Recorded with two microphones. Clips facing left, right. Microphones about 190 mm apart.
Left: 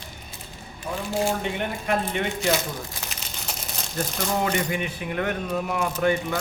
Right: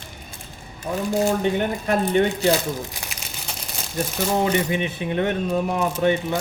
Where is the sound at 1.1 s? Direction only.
40° right (ahead or behind).